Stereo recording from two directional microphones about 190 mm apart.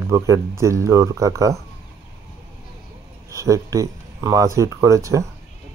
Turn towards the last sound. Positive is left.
turn(degrees=-15)  # may be behind; listen again after turning